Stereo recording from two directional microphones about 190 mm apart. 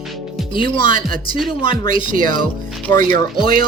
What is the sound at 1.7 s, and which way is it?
Speech, 45° right (ahead or behind).